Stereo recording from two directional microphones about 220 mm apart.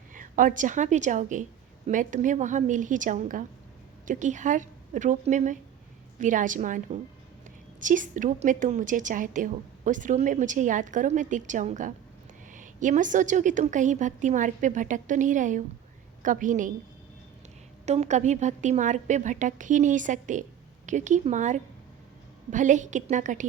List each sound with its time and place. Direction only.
0.1 s a woman's voice: 35° right (ahead or behind)
17.8 s a woman's voice: 30° right (ahead or behind)